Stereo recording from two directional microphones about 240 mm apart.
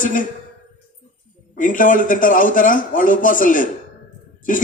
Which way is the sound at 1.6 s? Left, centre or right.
Left.